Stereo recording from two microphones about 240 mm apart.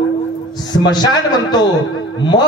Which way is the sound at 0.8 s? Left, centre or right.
Centre.